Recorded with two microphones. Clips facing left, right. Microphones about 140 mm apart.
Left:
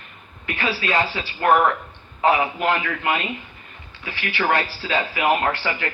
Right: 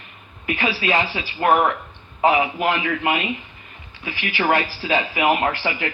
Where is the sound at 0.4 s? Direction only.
20° right (ahead or behind).